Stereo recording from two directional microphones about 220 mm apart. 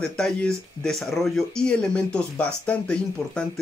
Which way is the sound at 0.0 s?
5° left (ahead or behind).